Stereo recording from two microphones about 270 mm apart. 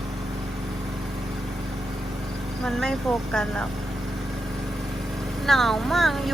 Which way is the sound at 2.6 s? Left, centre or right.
Centre.